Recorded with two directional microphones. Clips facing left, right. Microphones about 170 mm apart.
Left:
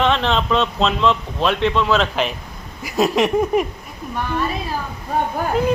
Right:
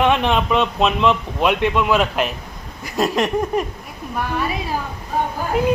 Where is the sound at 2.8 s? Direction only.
5° left (ahead or behind).